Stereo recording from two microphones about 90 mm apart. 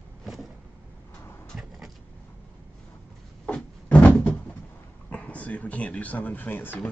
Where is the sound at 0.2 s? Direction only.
Centre (ahead or behind).